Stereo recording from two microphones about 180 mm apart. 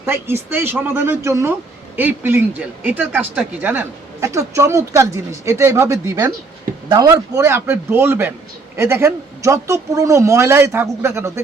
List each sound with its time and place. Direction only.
0.0 s speech: 15° right (ahead or behind)